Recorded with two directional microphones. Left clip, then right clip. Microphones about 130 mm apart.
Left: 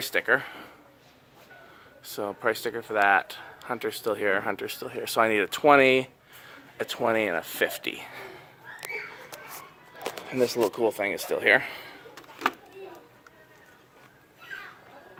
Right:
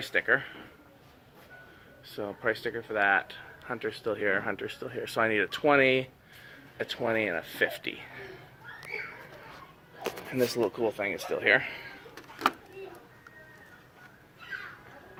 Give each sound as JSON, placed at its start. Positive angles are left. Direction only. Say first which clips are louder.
{"t": 0.0, "sound": "speech", "louder": "left 2 dB", "side_deg": 45}
{"t": 2.1, "sound": "speech", "louder": "left 3 dB", "side_deg": 50}
{"t": 10.2, "sound": "speech", "louder": "left 4 dB", "side_deg": 30}
{"t": 10.8, "sound": "speech", "louder": "left 4 dB", "side_deg": 55}